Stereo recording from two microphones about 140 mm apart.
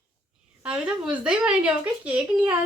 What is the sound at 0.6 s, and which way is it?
Speech, 5° right (ahead or behind).